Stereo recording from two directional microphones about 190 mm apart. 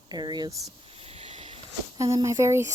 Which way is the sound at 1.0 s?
35° right (ahead or behind).